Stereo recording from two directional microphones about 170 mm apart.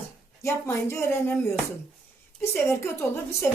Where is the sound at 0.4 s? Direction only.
15° left (ahead or behind).